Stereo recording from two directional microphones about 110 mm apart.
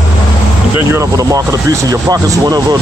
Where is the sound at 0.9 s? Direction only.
30° right (ahead or behind).